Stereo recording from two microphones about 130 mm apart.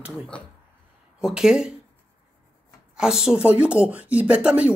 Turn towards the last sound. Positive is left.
turn(degrees=-10)  # may be behind; listen again after turning